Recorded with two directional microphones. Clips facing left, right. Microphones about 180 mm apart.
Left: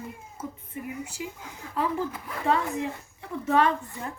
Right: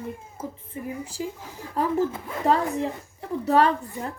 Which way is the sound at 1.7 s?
40° right (ahead or behind).